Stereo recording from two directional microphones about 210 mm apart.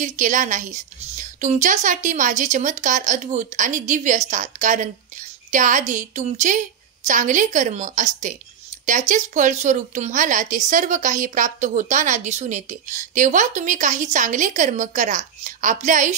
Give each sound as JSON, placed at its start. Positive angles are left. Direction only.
{"t": 0.0, "sound": "a woman's voice", "side_deg": -35}